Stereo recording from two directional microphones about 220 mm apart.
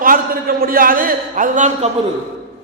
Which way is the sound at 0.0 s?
40° right (ahead or behind).